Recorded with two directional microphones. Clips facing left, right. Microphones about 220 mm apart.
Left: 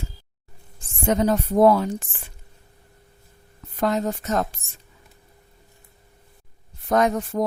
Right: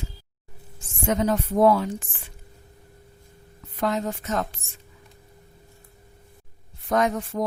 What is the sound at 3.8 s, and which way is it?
Speech, 40° left (ahead or behind).